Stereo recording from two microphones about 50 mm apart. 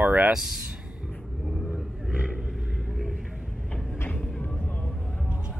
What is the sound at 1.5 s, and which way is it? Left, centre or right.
Vehicle, centre.